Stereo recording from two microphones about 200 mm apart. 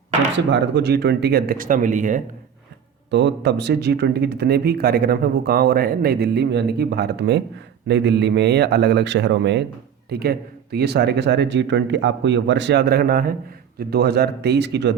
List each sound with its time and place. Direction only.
0.3 s speech: 60° right (ahead or behind); by 2.2 s 40° right (ahead or behind)
3.1 s speech: 60° right (ahead or behind)